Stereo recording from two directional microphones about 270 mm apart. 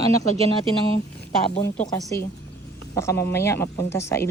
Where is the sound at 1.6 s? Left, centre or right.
Centre.